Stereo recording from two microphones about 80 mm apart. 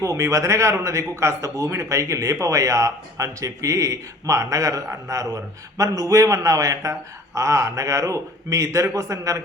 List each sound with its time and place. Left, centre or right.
0.0 s speech: right